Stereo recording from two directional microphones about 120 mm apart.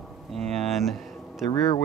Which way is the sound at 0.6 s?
Centre (ahead or behind).